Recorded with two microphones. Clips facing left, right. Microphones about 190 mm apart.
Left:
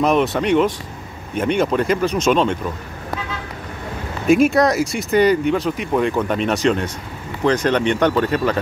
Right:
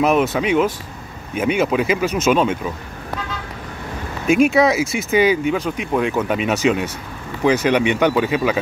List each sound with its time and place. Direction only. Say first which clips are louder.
0.0 s speech: even; 5° right (ahead or behind)
4.3 s speech: even; centre (ahead or behind)